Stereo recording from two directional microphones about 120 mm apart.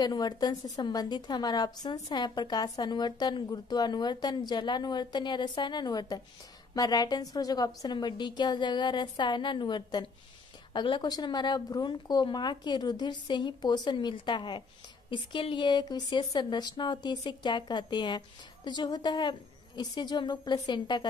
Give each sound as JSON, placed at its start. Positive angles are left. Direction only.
{"t": 0.0, "sound": "a woman's voice", "side_deg": 35}